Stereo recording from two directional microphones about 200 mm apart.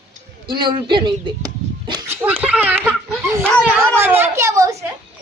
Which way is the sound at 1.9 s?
20° right (ahead or behind).